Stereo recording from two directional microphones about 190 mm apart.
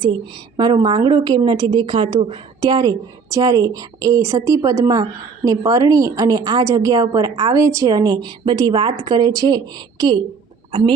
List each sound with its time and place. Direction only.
0.5 s a woman's voice: 20° right (ahead or behind)